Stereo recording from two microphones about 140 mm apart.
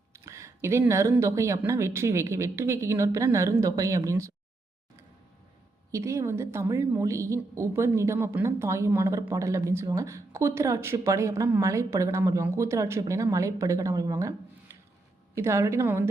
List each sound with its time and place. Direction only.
0.1 s a sound: 20° right (ahead or behind)
1.2 s a woman's voice: 20° right (ahead or behind)
5.9 s a woman's voice: 20° right (ahead or behind)